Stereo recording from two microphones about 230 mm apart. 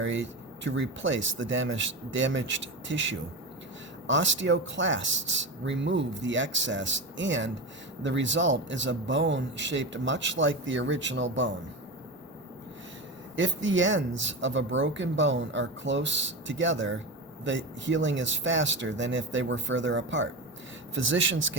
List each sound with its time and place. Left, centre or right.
0.0 s speech: right
13.3 s speech: right